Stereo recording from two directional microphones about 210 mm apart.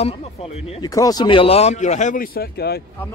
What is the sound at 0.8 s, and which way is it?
Speech, 15° left (ahead or behind).